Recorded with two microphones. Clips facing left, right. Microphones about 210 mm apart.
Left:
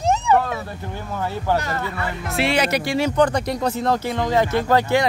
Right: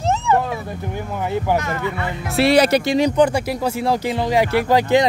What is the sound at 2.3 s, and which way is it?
Speech, 35° right (ahead or behind).